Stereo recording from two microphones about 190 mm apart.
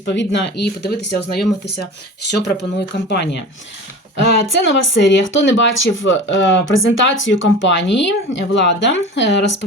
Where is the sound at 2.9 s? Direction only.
65° left (ahead or behind).